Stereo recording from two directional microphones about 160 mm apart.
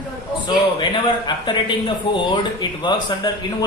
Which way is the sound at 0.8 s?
30° left (ahead or behind).